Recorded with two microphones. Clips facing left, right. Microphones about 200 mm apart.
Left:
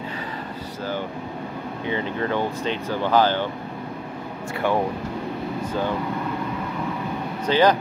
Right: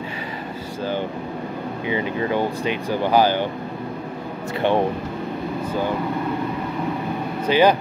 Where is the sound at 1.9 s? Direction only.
10° right (ahead or behind).